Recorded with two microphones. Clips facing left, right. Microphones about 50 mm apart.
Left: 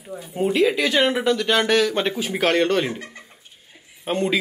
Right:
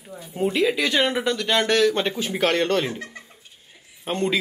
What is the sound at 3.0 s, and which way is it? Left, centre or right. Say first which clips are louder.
Speech: right 1 dB; left.